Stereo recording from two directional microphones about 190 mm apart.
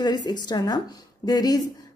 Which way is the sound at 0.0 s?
25° left (ahead or behind).